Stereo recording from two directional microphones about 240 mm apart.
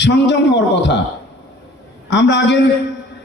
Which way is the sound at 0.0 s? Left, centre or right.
Left.